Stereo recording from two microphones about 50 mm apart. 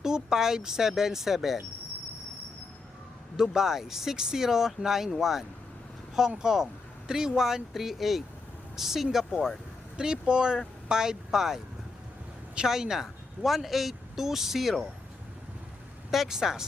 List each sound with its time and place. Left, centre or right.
0.0 s speech: centre
3.3 s speech: centre
10.0 s speech: centre
16.1 s speech: centre